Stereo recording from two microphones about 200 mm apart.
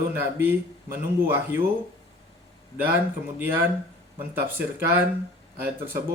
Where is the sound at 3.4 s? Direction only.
10° right (ahead or behind).